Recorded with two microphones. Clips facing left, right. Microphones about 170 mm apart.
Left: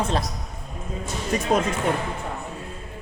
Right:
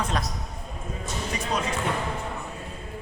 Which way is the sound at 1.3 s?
45° left (ahead or behind).